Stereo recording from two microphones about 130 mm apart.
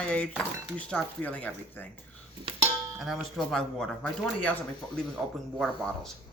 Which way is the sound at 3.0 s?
Centre (ahead or behind).